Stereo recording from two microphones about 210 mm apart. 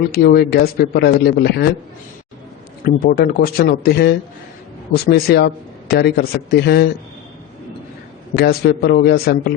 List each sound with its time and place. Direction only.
0.1 s speech: 45° left (ahead or behind)
2.8 s speech: 45° left (ahead or behind)
8.4 s speech: 45° left (ahead or behind)